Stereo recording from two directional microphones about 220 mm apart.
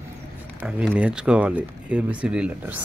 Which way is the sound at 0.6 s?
5° right (ahead or behind).